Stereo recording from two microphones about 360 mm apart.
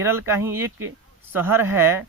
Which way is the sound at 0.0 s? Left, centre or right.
Centre.